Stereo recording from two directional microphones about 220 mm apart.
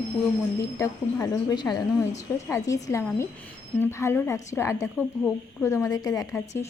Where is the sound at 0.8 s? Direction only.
15° left (ahead or behind).